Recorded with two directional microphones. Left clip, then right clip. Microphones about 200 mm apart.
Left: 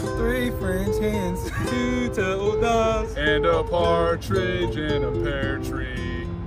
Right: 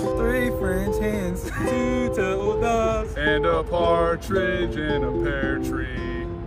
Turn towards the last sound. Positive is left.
turn(degrees=-5)  # may be behind; listen again after turning